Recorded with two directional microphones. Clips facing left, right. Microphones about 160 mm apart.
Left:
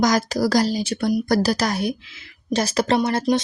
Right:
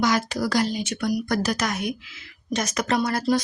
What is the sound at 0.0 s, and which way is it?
A woman's voice, 40° left (ahead or behind).